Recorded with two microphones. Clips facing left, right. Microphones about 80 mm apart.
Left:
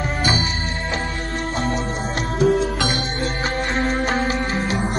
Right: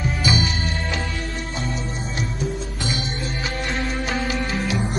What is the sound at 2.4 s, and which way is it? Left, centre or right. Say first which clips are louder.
Music: left 10 dB; left.